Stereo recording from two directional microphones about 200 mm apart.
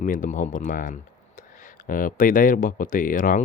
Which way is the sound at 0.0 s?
40° left (ahead or behind).